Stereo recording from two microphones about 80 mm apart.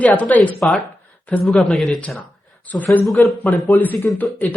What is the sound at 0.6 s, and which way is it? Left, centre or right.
Speech, centre.